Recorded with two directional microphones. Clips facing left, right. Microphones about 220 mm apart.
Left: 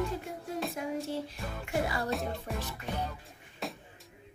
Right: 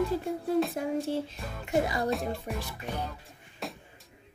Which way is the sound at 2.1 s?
Centre (ahead or behind).